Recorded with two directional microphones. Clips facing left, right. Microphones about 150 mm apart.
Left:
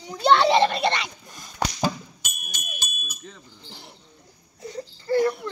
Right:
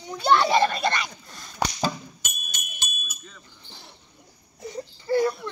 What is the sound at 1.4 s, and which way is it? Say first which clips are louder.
Chop: even; 10° left (ahead or behind).